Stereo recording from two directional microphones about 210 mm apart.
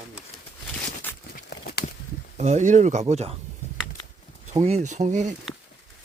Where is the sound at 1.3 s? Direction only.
45° left (ahead or behind).